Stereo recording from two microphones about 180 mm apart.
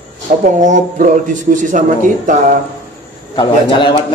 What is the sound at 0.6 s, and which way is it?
A man's voice, 45° right (ahead or behind).